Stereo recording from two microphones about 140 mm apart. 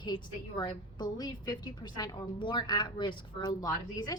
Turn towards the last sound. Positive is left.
turn(degrees=25)  # may be behind; listen again after turning